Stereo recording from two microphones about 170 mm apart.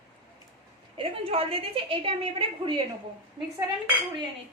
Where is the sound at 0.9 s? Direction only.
35° right (ahead or behind).